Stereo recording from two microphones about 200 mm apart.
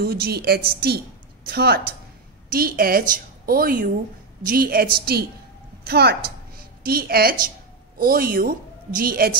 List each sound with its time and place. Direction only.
0.0 s a woman's voice: 50° right (ahead or behind)